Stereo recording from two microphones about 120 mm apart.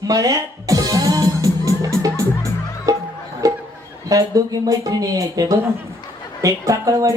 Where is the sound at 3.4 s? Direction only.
30° right (ahead or behind).